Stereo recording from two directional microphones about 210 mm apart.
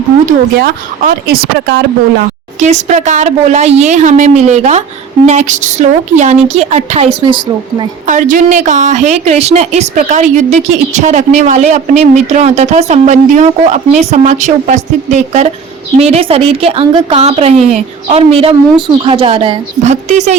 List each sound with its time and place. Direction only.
0.3 s speech: 45° right (ahead or behind)
2.6 s a woman's voice: 35° right (ahead or behind)